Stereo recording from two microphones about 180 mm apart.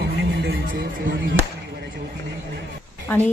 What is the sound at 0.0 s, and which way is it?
Music, 70° right (ahead or behind).